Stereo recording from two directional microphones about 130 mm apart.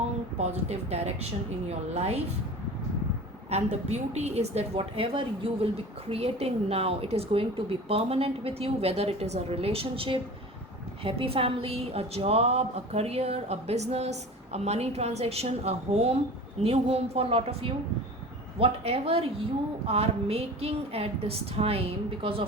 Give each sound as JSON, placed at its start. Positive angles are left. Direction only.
{"t": 0.3, "sound": "a woman's voice", "side_deg": -55}
{"t": 3.5, "sound": "a woman's voice", "side_deg": -60}